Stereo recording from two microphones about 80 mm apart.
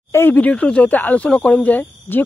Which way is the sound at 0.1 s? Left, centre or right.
Left.